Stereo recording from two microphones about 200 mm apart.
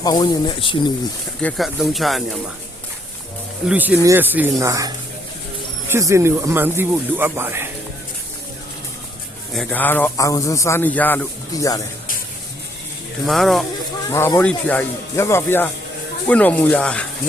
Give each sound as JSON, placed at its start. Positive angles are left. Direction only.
{"t": 0.0, "sound": "speech", "side_deg": 20}
{"t": 1.4, "sound": "speech", "side_deg": 5}
{"t": 3.7, "sound": "speech", "side_deg": -10}
{"t": 9.5, "sound": "speech", "side_deg": 0}
{"t": 13.2, "sound": "speech", "side_deg": 0}
{"t": 14.1, "sound": "speech", "side_deg": 15}